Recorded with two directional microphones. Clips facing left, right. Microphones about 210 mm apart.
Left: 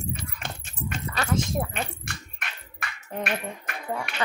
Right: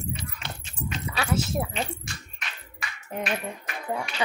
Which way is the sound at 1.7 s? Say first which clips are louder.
Right 1 dB; 55° left (ahead or behind).